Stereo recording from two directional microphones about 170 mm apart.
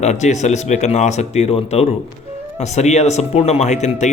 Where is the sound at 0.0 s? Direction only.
45° left (ahead or behind).